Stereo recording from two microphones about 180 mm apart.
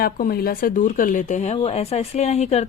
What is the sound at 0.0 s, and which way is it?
Speech, 55° left (ahead or behind).